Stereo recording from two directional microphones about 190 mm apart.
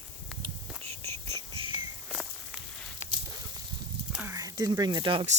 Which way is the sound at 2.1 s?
Centre (ahead or behind).